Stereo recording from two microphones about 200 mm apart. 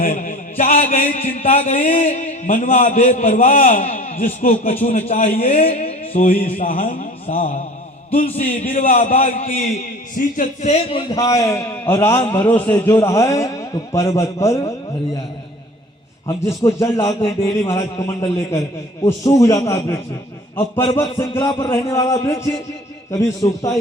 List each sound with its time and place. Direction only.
0.0 s a man's voice: 40° left (ahead or behind)
6.4 s a man's voice: 40° left (ahead or behind)
8.6 s a man's voice: 45° left (ahead or behind); by 14.7 s 15° left (ahead or behind)
16.2 s a man's voice: 15° left (ahead or behind)